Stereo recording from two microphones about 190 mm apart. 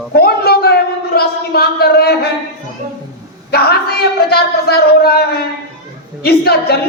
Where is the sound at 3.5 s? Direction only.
55° left (ahead or behind).